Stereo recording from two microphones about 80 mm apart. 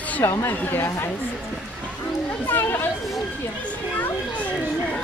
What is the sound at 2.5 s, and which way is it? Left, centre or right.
Children playing, left.